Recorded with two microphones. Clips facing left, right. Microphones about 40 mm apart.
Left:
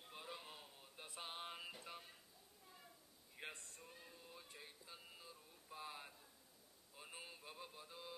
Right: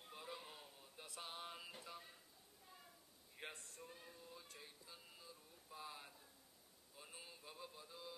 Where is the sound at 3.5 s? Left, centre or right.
Left.